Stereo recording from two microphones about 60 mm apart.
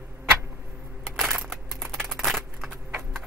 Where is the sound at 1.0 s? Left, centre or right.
Centre.